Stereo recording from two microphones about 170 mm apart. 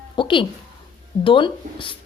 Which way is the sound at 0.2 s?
30° left (ahead or behind).